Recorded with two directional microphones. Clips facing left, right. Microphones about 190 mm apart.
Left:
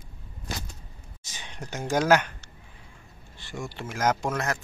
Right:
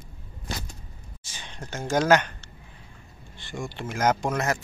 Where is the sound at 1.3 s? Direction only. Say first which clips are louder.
Even; 15° left (ahead or behind).